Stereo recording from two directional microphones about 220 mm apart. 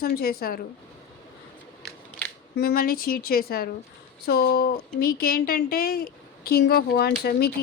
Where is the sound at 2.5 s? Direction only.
45° left (ahead or behind).